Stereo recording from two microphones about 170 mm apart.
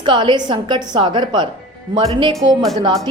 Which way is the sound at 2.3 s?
20° right (ahead or behind).